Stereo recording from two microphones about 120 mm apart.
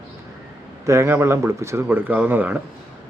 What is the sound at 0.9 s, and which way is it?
Speech, 20° right (ahead or behind).